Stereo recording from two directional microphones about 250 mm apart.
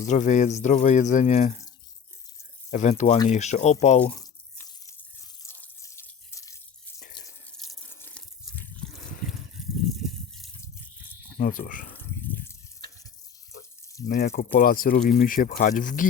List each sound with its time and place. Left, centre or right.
0.1 s speech: left
2.6 s speech: left
4.0 s drip: centre
5.4 s water: centre
6.3 s water tap: centre
7.6 s water: centre
10.0 s drip: centre
11.3 s speech: left
11.9 s water: centre
14.1 s speech: left